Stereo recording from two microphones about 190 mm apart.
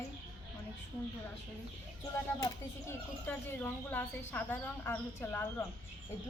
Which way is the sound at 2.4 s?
10° left (ahead or behind).